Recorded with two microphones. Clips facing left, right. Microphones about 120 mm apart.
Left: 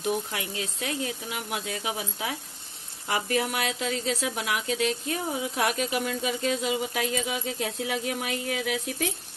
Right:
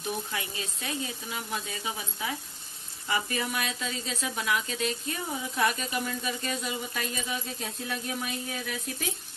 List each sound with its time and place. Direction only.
0.3 s speech: 90° left